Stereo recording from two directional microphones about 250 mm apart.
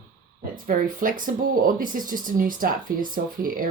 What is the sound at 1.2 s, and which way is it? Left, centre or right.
Speech, right.